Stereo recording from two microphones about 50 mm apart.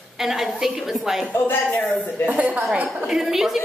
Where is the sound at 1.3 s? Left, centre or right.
Left.